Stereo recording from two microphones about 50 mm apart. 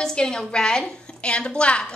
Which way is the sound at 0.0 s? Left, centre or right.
Centre.